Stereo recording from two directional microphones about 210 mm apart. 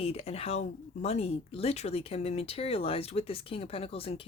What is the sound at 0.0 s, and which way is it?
Speech, 30° left (ahead or behind).